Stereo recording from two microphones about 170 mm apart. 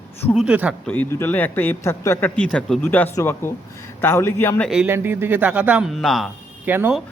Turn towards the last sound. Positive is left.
turn(degrees=-10)  # may be behind; listen again after turning